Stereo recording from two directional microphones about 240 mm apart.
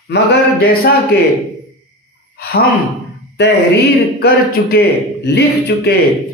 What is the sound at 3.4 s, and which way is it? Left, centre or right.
A man's voice, left.